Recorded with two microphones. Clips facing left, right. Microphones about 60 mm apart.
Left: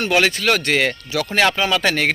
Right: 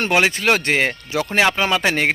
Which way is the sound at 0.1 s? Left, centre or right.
Right.